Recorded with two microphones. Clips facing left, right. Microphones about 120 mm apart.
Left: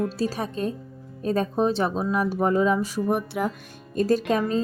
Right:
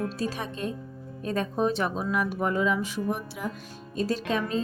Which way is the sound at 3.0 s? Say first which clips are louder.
Left 7 dB; 60° left (ahead or behind).